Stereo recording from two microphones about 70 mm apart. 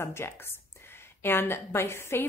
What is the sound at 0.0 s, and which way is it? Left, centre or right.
A woman's voice, left.